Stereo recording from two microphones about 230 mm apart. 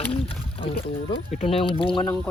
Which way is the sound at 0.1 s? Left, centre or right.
Left.